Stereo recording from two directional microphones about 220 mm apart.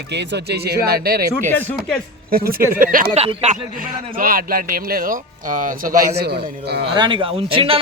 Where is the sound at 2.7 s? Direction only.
40° right (ahead or behind).